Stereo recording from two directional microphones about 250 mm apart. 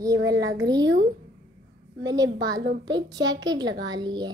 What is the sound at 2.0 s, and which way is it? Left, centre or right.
A child's voice, centre.